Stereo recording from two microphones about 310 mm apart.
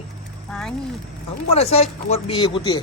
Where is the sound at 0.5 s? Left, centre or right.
Centre.